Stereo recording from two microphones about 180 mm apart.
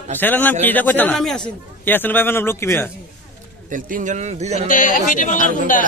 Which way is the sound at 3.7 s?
50° right (ahead or behind).